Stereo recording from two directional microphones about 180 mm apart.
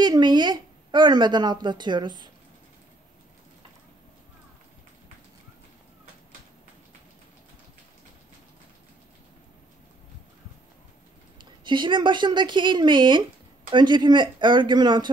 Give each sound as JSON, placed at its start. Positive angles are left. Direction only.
{"t": 0.0, "sound": "a woman's voice", "side_deg": -25}
{"t": 11.6, "sound": "speech", "side_deg": -25}